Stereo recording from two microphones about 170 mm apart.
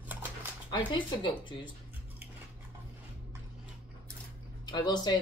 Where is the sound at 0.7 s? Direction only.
25° left (ahead or behind).